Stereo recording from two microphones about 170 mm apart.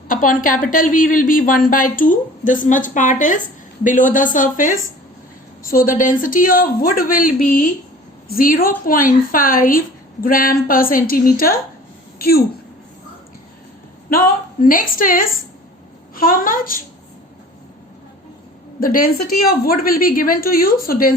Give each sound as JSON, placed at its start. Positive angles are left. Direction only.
{"t": 0.1, "sound": "a woman's voice", "side_deg": 55}
{"t": 14.6, "sound": "a woman's voice", "side_deg": 55}
{"t": 18.8, "sound": "a woman's voice", "side_deg": 55}